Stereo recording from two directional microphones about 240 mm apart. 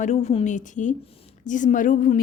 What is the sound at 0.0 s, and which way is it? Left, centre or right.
A woman's voice, left.